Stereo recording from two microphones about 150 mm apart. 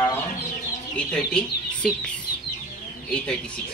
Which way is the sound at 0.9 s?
10° left (ahead or behind).